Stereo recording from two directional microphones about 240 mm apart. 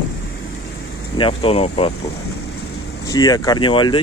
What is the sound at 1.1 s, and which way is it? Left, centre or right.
Speech, left.